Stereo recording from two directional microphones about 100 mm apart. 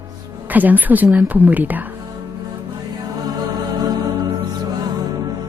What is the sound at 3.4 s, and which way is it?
Music, 40° right (ahead or behind).